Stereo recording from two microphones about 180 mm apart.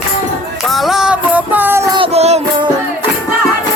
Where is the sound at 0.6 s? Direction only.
Centre (ahead or behind).